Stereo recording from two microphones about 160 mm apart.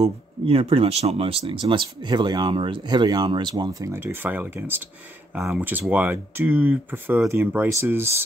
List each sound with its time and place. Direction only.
0.0 s speech: 40° right (ahead or behind); by 8.1 s 15° right (ahead or behind)